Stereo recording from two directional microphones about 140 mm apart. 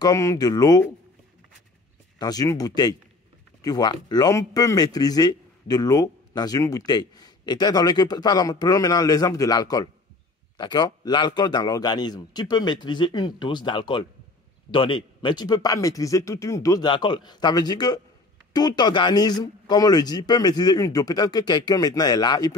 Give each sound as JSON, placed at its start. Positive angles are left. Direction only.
{"t": 0.0, "sound": "speech", "side_deg": 25}
{"t": 2.1, "sound": "a man's voice", "side_deg": 25}